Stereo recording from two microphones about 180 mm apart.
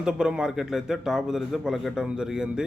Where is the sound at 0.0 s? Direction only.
5° right (ahead or behind).